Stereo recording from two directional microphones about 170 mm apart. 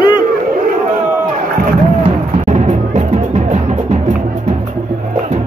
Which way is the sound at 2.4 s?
40° right (ahead or behind).